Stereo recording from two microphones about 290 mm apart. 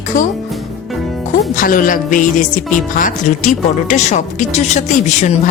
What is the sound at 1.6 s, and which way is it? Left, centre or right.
A woman's voice, left.